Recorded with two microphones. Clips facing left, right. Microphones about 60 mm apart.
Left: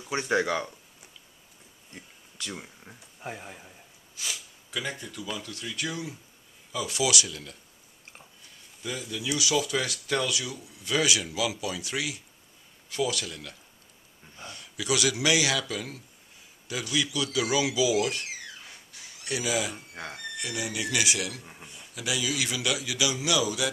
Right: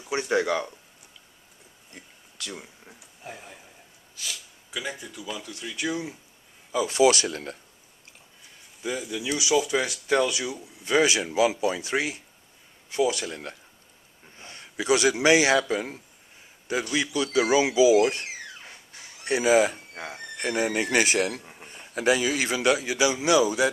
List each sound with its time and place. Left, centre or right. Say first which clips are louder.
0.0 s speech: right 2 dB; centre
2.4 s a man's voice: even; centre
4.1 s sneeze: even; left
4.6 s speech: even; centre
6.7 s speech: right 8 dB; right
8.8 s speech: right 3 dB; centre
18.9 s a sound: right 7 dB; right
19.9 s speech: right 2 dB; centre
20.3 s speech: right 9 dB; right